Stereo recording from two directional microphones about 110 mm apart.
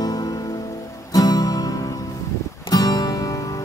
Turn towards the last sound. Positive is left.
turn(degrees=35)  # may be behind; listen again after turning